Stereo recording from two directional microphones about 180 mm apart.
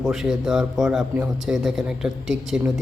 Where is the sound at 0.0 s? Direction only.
Centre (ahead or behind).